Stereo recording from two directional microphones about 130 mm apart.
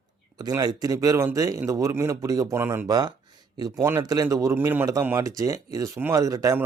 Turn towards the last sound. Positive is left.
turn(degrees=-25)  # may be behind; listen again after turning